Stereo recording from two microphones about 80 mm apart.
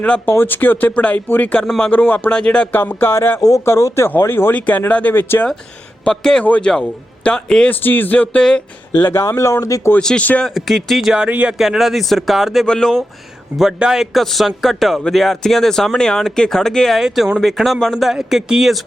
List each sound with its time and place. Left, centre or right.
0.3 s speech: left
2.7 s speech: left
4.9 s speech: centre
7.7 s speech: left
9.2 s speech: left
10.0 s speech: centre
11.1 s speech: centre
11.5 s speech: centre
13.6 s speech: centre